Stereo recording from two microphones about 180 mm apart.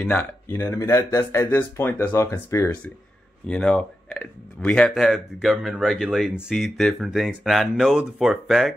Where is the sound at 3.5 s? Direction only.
5° left (ahead or behind).